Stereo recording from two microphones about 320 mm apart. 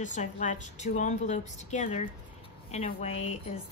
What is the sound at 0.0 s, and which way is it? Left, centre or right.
A woman's voice, left.